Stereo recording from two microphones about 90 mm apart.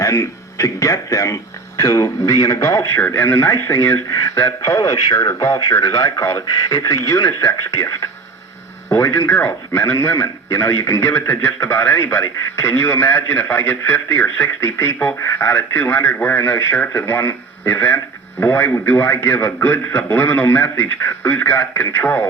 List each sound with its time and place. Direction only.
0.0 s speech: 35° left (ahead or behind)
3.0 s speech: 20° left (ahead or behind)
8.9 s speech: 25° left (ahead or behind)